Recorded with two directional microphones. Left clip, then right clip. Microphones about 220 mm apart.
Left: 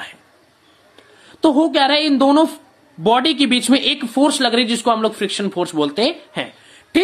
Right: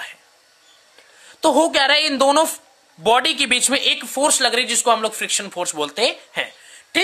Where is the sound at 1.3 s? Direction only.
35° right (ahead or behind).